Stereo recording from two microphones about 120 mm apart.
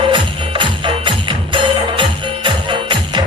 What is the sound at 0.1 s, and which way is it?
Music, 45° right (ahead or behind).